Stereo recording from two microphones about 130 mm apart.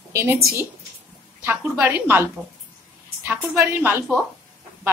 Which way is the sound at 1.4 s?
15° right (ahead or behind).